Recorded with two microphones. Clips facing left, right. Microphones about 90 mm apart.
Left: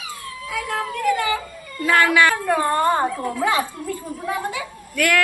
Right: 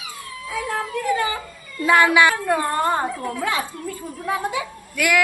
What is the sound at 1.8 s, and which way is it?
A woman's voice, 15° right (ahead or behind).